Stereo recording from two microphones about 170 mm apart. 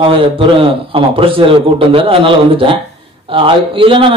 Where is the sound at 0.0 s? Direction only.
30° right (ahead or behind).